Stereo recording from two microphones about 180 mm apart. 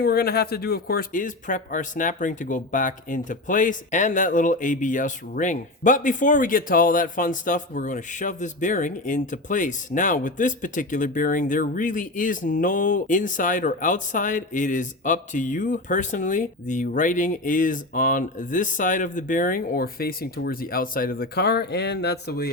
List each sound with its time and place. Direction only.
0.0 s speech: 60° left (ahead or behind)